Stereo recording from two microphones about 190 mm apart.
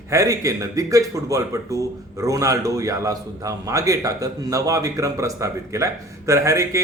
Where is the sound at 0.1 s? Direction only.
15° right (ahead or behind).